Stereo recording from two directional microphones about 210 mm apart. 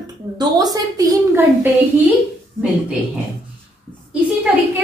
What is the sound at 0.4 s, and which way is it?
A woman's voice, 20° right (ahead or behind).